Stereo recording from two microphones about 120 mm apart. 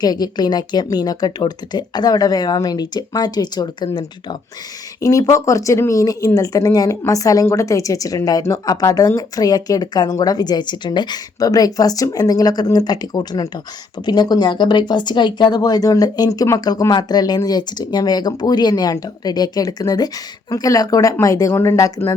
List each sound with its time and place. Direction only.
0.0 s speech: 35° left (ahead or behind)
4.9 s speech: 30° left (ahead or behind)